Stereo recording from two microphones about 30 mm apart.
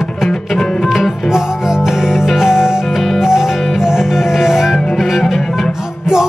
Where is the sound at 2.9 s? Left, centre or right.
Centre.